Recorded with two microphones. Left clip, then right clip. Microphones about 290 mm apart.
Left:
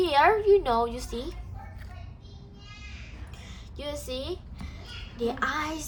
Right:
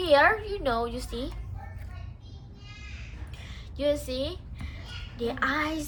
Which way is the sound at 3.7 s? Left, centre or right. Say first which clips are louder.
Right 7 dB; left.